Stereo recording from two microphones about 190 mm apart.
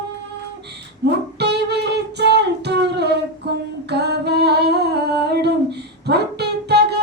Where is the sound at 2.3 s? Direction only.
60° right (ahead or behind).